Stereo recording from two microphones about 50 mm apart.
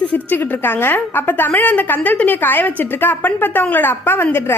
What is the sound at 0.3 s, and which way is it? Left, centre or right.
A woman's voice, left.